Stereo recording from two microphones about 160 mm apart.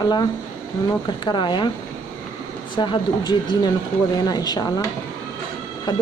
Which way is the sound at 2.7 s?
30° left (ahead or behind).